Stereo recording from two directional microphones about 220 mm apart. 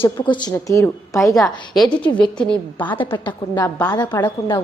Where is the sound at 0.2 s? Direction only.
20° left (ahead or behind).